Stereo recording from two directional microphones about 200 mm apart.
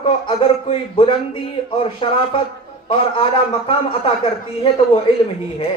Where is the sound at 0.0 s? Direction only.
25° left (ahead or behind).